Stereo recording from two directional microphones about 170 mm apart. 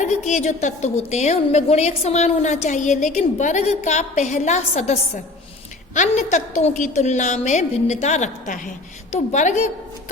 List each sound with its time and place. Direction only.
0.0 s a woman's voice: 45° left (ahead or behind)